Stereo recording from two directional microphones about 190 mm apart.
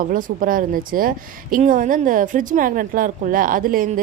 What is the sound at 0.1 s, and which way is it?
A woman's voice, 45° right (ahead or behind).